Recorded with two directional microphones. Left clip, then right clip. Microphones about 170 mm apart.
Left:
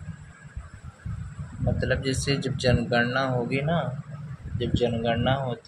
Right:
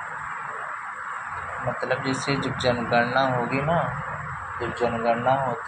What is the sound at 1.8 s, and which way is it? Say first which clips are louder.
Speech: even; 55° left (ahead or behind).